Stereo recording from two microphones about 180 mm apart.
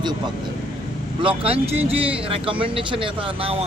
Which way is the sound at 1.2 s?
30° right (ahead or behind).